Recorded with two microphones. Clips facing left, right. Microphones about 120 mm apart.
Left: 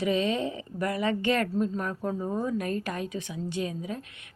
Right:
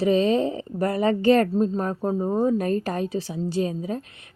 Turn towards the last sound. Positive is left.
turn(degrees=-35)  # may be behind; listen again after turning